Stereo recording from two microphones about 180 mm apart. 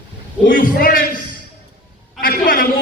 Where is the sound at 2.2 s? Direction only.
55° left (ahead or behind).